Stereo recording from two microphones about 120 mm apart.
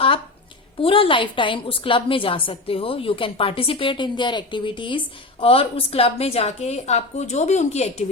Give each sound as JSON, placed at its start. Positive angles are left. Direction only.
{"t": 0.8, "sound": "a woman's voice", "side_deg": 50}